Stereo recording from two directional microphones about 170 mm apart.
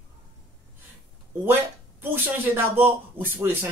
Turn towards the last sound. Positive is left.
turn(degrees=-15)  # may be behind; listen again after turning